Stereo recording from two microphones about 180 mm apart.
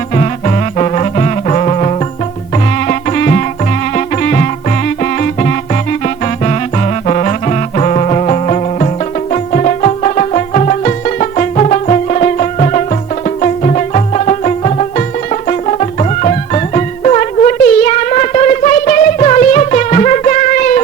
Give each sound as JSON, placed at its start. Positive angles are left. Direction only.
{"t": 0.1, "sound": "music", "side_deg": 40}
{"t": 2.8, "sound": "music", "side_deg": 50}